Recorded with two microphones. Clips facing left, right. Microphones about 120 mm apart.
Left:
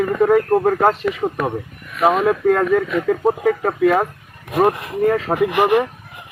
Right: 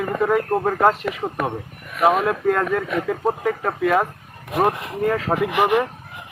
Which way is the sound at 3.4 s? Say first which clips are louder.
Left 5 dB; 20° left (ahead or behind).